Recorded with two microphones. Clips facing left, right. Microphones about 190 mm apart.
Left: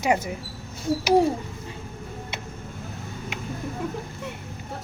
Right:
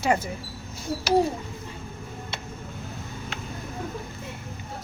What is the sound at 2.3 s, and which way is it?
Tick, 20° left (ahead or behind).